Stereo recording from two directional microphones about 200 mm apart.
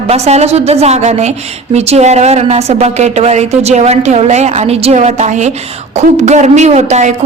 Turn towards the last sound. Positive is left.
turn(degrees=-35)  # may be behind; listen again after turning